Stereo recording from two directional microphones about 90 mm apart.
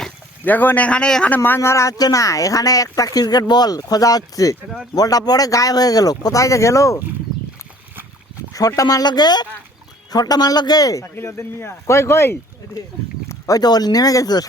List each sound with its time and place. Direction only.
0.4 s speech: 20° left (ahead or behind)
1.4 s speech: 30° left (ahead or behind)
8.5 s speech: 40° left (ahead or behind)
11.1 s speech: 25° left (ahead or behind)
13.5 s speech: 50° left (ahead or behind)